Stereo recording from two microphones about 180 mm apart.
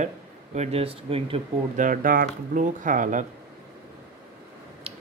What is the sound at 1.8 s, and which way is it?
Speech, 50° right (ahead or behind).